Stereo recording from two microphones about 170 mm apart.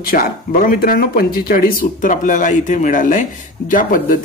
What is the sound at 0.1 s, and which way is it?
Speech, 55° left (ahead or behind).